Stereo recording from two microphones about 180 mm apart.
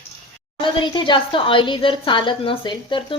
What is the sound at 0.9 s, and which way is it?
Speech, 25° left (ahead or behind).